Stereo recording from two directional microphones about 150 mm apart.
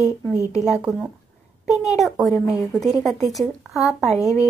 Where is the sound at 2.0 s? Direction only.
Centre (ahead or behind).